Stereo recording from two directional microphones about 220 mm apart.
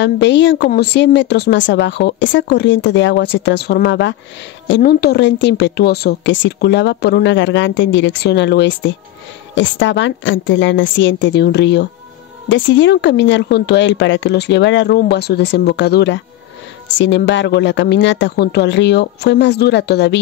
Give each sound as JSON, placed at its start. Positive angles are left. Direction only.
{"t": 0.0, "sound": "a woman's voice", "side_deg": 55}